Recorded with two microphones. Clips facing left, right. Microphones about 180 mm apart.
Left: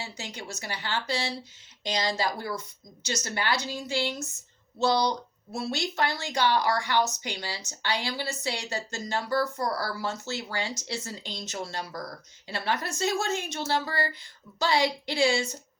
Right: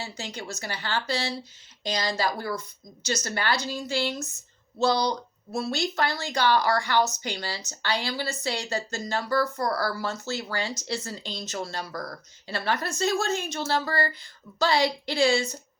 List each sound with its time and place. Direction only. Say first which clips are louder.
0.0 s speech: right 3 dB; 20° left (ahead or behind)